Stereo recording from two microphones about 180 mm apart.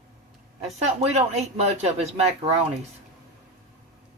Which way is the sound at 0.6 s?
35° right (ahead or behind).